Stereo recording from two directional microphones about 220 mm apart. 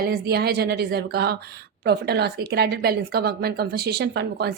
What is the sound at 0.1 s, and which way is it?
A woman's voice, 45° right (ahead or behind).